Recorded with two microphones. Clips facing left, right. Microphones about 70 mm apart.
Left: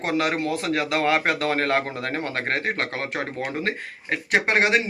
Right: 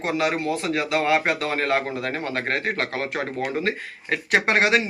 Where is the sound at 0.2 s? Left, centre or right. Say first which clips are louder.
Even; left.